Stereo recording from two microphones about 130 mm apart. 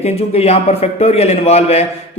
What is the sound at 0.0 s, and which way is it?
A man's voice, 50° left (ahead or behind).